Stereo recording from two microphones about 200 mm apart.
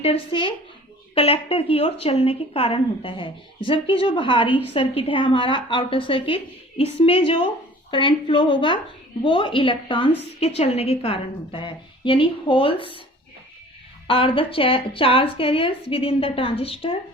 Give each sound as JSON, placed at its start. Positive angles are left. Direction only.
{"t": 0.0, "sound": "speech", "side_deg": 25}
{"t": 14.1, "sound": "speech", "side_deg": 25}